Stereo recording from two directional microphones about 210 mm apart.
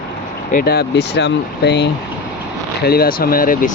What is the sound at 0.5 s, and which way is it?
Speech, 50° left (ahead or behind).